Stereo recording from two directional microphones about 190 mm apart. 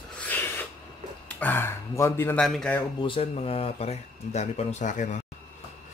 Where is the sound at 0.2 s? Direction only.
10° left (ahead or behind).